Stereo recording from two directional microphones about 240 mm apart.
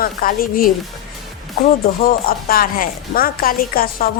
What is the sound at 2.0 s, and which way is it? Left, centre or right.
A woman's voice, left.